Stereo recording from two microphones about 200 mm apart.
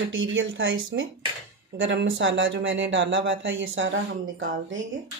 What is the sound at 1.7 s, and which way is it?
Speech, 65° right (ahead or behind).